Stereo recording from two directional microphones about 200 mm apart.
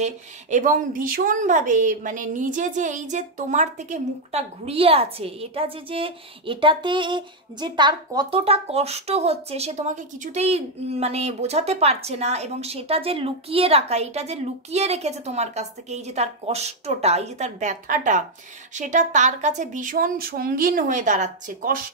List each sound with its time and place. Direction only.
0.0 s a woman's voice: 40° right (ahead or behind)